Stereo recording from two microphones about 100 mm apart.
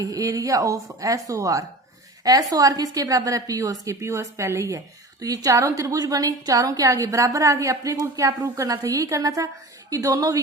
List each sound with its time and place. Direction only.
0.0 s a woman's voice: 35° right (ahead or behind)